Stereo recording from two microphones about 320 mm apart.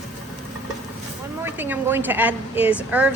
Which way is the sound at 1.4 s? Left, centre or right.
Centre.